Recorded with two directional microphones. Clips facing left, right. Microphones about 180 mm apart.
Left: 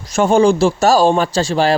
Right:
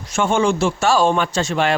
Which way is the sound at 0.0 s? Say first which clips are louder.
Left 6 dB; 40° left (ahead or behind).